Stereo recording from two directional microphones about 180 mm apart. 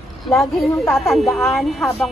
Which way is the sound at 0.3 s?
Centre (ahead or behind).